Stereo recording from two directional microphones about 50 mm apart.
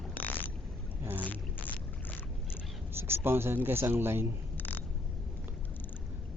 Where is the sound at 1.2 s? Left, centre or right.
Left.